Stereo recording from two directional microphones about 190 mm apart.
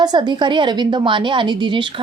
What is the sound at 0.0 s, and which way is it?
A woman's voice, 25° right (ahead or behind).